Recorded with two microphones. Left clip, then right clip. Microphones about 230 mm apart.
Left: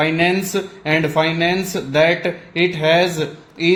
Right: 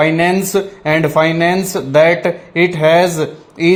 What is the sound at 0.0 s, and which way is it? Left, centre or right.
Speech, right.